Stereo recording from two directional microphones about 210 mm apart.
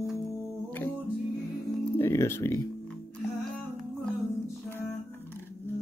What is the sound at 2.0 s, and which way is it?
Music, 10° left (ahead or behind).